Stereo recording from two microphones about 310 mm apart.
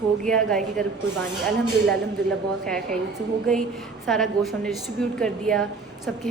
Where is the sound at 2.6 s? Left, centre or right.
Centre.